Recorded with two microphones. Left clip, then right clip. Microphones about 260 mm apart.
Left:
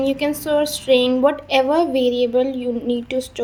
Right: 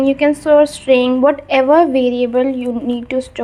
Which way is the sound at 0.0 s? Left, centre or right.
Centre.